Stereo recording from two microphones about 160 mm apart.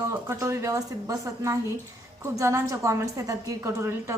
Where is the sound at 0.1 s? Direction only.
15° right (ahead or behind).